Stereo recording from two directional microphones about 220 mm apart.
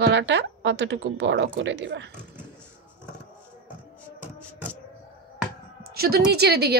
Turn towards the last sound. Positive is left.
turn(degrees=-45)  # may be behind; listen again after turning